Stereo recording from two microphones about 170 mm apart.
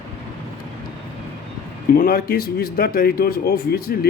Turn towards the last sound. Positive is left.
turn(degrees=60)  # may be behind; listen again after turning